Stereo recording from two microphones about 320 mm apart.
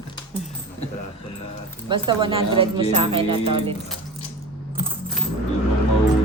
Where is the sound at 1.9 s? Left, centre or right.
Centre.